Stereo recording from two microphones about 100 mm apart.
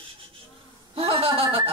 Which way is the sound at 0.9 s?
70° right (ahead or behind).